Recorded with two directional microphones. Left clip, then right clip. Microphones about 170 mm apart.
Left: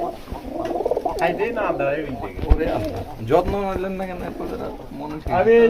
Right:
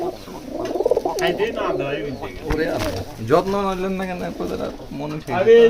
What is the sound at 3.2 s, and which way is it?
Speech, 80° right.